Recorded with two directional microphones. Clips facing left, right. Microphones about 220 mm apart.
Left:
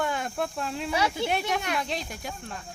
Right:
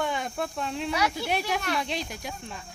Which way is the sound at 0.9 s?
25° left (ahead or behind).